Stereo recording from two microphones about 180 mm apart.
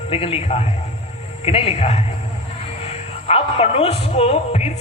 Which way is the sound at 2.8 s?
35° left (ahead or behind).